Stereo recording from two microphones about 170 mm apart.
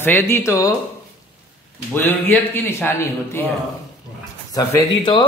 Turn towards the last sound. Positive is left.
turn(degrees=25)  # may be behind; listen again after turning